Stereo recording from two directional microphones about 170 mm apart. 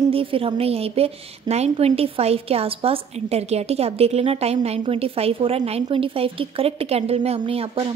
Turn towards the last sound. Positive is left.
turn(degrees=-35)  # may be behind; listen again after turning